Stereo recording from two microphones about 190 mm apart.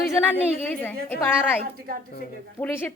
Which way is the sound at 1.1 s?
10° left (ahead or behind).